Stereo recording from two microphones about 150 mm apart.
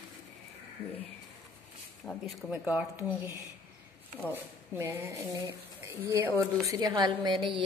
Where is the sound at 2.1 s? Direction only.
Centre (ahead or behind).